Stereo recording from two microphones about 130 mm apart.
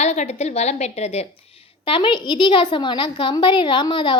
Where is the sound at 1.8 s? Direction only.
40° left (ahead or behind).